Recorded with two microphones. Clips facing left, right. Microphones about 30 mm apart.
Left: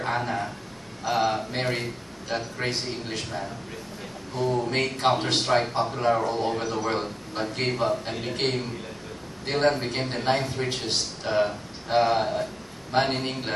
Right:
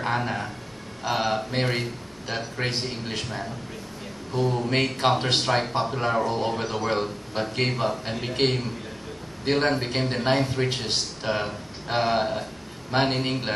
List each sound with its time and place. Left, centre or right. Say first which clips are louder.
0.0 s a man's voice: even; centre
4.6 s a man's voice: right 2 dB; centre